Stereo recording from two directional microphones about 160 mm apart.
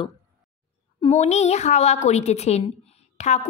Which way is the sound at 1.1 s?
45° left (ahead or behind).